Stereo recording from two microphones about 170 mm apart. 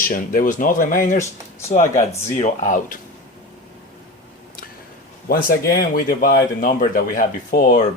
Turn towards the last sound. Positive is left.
turn(degrees=55)  # may be behind; listen again after turning